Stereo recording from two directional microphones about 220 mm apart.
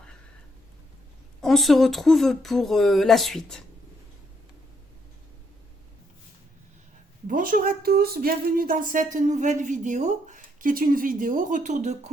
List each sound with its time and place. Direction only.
1.4 s speech: centre (ahead or behind)
7.3 s speech: 40° right (ahead or behind)